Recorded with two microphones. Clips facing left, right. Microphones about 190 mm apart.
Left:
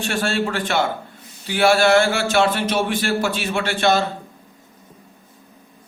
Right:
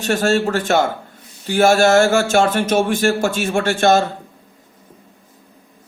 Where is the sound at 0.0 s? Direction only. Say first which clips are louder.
Right 5 dB; 40° right (ahead or behind).